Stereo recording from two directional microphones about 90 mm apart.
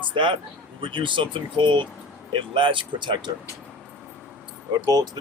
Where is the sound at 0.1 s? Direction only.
60° right (ahead or behind).